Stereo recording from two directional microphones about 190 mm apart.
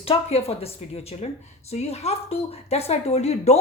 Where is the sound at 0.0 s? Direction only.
30° left (ahead or behind).